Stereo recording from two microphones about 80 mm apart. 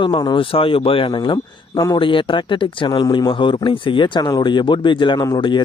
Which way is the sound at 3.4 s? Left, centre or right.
Left.